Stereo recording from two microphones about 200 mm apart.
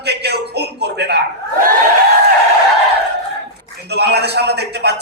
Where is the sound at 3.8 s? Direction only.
55° right (ahead or behind).